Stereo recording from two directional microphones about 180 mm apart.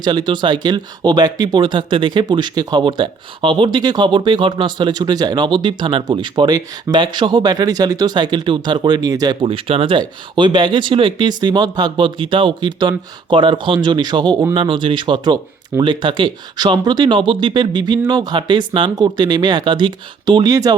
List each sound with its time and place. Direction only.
0.0 s speech: 25° right (ahead or behind)